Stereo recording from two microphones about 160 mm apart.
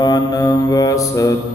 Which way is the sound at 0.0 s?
25° left (ahead or behind).